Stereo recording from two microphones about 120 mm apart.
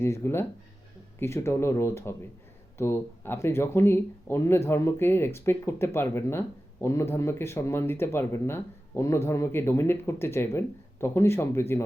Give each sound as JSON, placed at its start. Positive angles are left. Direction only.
{"t": 0.0, "sound": "speech", "side_deg": 20}